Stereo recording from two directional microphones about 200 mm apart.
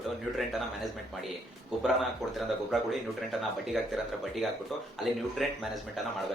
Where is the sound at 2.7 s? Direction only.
Centre (ahead or behind).